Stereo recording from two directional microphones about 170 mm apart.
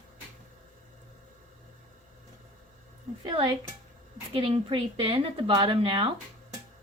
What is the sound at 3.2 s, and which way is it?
A woman's voice, 30° right (ahead or behind).